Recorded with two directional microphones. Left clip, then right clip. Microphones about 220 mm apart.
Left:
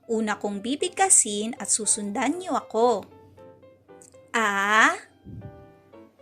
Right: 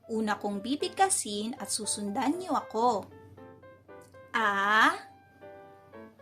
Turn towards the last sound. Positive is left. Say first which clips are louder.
# left 4 dB
turn(degrees=20)  # may be behind; listen again after turning